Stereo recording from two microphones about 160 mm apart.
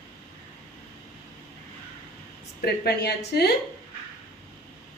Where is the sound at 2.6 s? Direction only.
80° left.